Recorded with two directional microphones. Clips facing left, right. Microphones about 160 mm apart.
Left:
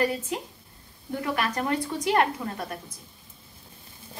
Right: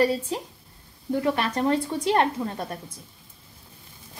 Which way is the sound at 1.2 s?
30° right (ahead or behind).